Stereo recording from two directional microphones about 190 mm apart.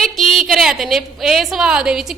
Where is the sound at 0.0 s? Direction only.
Centre (ahead or behind).